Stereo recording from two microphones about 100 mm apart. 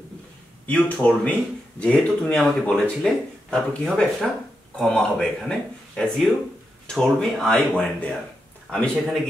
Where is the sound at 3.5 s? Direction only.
5° left (ahead or behind).